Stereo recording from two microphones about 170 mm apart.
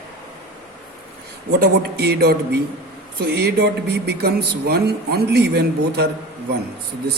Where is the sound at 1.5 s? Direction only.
70° right (ahead or behind).